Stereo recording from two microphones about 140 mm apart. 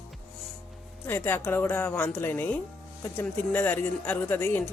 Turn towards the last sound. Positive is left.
turn(degrees=15)  # may be behind; listen again after turning